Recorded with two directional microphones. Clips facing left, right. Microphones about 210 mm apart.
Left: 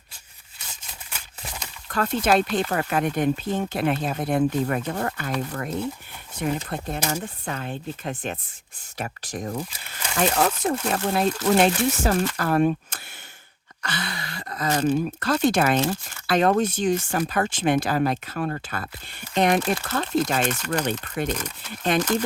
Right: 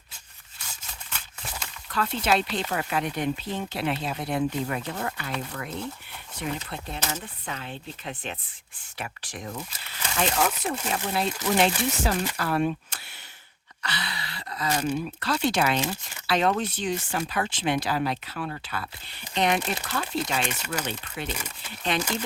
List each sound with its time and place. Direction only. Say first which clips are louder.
1.9 s speech: left 4 dB; 50° left (ahead or behind)